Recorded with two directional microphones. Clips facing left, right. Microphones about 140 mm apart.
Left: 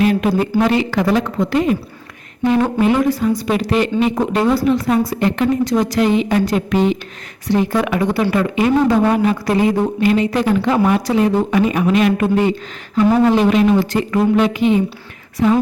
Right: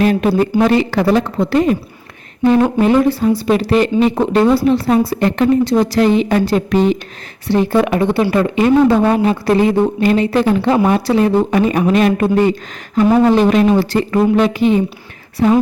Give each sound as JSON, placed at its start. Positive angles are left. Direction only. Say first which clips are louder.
{"t": 0.0, "sound": "a woman's voice", "louder": "right 2 dB", "side_deg": -35}
{"t": 2.7, "sound": "a woman's voice", "louder": "right 3 dB", "side_deg": -35}